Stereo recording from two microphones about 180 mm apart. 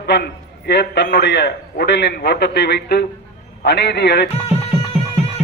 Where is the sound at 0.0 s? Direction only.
65° left (ahead or behind).